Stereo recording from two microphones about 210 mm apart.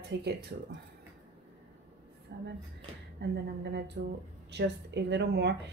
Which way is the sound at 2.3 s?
50° right (ahead or behind).